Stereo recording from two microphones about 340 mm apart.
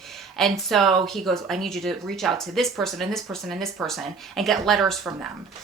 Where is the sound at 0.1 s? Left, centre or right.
Centre.